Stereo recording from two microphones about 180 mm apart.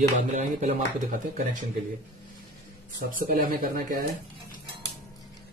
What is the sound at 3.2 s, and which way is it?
Speech, 50° right (ahead or behind).